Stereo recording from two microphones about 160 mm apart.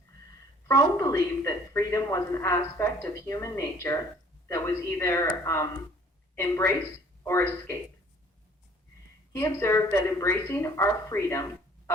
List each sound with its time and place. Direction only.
0.7 s a woman's voice: 20° left (ahead or behind)
9.3 s speech: 15° left (ahead or behind)